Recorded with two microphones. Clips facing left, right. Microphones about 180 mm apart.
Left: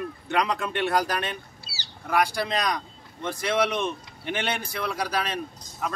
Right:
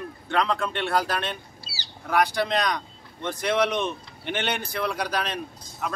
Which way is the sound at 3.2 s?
5° left (ahead or behind).